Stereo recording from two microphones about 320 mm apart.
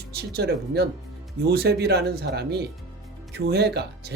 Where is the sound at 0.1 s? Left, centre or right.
Right.